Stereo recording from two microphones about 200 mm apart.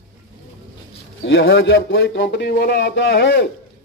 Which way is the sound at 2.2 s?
50° left (ahead or behind).